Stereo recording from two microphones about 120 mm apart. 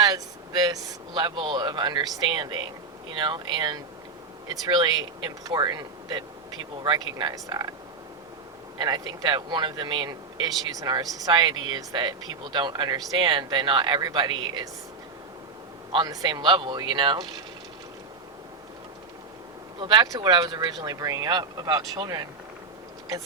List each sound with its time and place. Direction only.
0.0 s speech: 35° right (ahead or behind)
8.8 s speech: 40° right (ahead or behind)
16.0 s speech: 40° right (ahead or behind)
19.8 s speech: 40° right (ahead or behind)